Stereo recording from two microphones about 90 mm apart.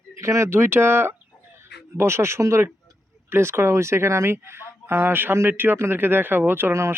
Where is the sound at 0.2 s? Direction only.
35° right (ahead or behind).